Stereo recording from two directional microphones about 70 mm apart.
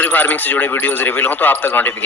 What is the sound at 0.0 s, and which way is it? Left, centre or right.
Speech, left.